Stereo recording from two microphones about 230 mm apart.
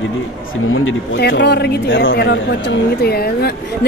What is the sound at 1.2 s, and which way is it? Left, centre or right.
Speech, left.